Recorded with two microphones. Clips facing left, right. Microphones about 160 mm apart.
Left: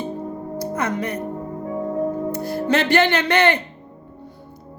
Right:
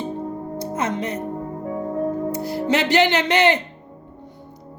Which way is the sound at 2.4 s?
20° right (ahead or behind).